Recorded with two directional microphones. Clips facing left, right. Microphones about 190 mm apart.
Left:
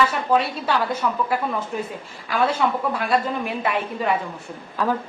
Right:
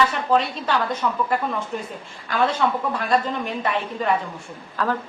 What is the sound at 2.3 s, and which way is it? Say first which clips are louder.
A woman's voice: even; 10° left (ahead or behind).